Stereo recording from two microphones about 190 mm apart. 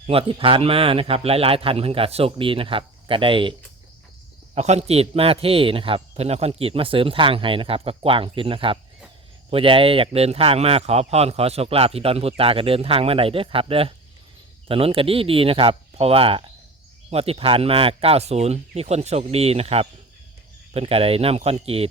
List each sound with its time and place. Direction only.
0.1 s a man's voice: 30° right (ahead or behind)
4.5 s a man's voice: 35° right (ahead or behind)